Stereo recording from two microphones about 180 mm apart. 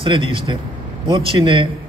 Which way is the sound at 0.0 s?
30° right (ahead or behind).